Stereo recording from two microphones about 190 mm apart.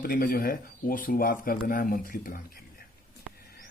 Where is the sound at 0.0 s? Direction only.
50° left (ahead or behind).